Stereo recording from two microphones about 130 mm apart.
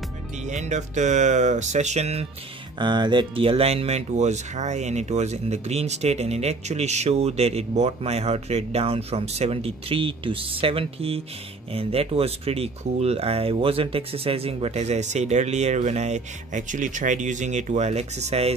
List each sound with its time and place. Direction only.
0.4 s speech: 65° right (ahead or behind)
2.8 s speech: 35° right (ahead or behind); by 18.5 s 55° right (ahead or behind)